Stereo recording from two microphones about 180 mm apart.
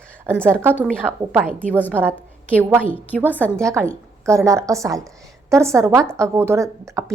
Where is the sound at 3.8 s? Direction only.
15° right (ahead or behind).